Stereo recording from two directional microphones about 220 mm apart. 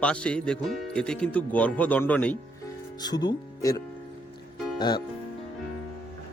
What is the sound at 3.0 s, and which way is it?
Speech, 20° left (ahead or behind).